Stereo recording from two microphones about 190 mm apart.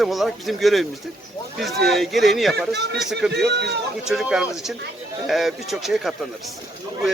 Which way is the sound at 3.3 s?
60° right (ahead or behind).